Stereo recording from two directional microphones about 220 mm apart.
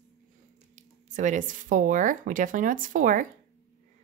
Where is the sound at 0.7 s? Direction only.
35° right (ahead or behind).